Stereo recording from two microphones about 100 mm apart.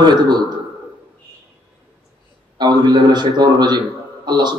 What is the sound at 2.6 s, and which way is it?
Speech, 45° right (ahead or behind).